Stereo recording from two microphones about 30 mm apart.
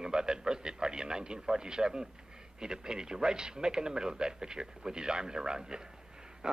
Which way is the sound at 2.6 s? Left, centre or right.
Right.